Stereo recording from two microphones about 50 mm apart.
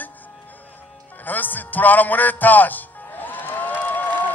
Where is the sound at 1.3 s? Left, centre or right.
Left.